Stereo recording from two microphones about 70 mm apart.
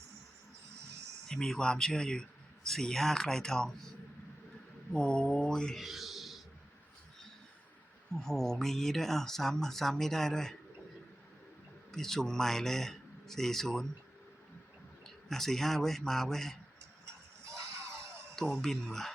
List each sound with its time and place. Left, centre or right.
1.3 s speech: centre
4.9 s speech: centre
5.8 s a sound: centre
8.1 s speech: centre
11.9 s speech: centre
15.0 s speech: centre
17.5 s a sound: right
18.3 s speech: centre